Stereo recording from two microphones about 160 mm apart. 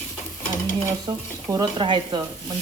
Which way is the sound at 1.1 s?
25° right (ahead or behind).